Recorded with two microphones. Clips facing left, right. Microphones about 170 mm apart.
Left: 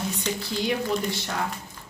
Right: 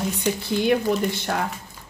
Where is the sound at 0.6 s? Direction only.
55° right (ahead or behind).